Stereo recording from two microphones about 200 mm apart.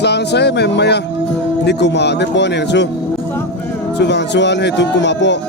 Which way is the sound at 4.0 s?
60° left (ahead or behind).